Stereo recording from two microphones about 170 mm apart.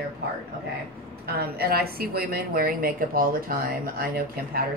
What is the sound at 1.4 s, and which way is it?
Speech, 65° right (ahead or behind).